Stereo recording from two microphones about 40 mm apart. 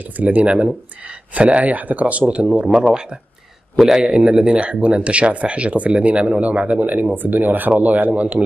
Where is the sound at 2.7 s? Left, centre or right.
Right.